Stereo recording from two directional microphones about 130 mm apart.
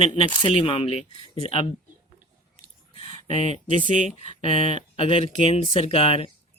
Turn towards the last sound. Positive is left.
turn(degrees=45)  # may be behind; listen again after turning